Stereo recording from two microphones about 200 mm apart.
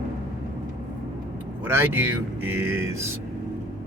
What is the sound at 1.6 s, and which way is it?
Speech, 10° right (ahead or behind).